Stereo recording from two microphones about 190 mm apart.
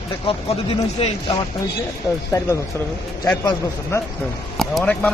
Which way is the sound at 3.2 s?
15° left (ahead or behind).